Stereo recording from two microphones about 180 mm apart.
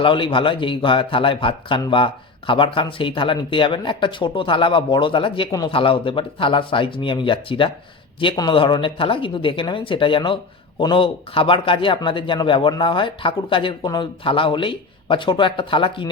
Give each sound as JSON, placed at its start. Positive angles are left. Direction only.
{"t": 0.0, "sound": "a man's voice", "side_deg": 30}